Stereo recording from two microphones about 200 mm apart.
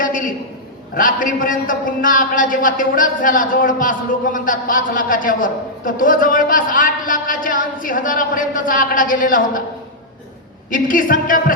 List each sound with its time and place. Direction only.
0.0 s a sound: 40° left (ahead or behind)
0.9 s a man's voice: 45° left (ahead or behind)
10.7 s a man's voice: 45° left (ahead or behind)